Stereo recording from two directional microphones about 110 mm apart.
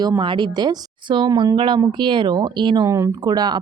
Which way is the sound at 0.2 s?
45° right (ahead or behind).